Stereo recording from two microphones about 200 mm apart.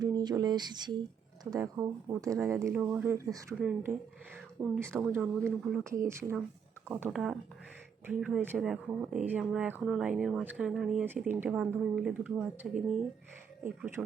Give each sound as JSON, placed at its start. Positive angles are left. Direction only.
{"t": 0.0, "sound": "speech", "side_deg": -20}